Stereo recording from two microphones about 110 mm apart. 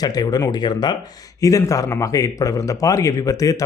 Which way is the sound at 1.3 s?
30° left (ahead or behind).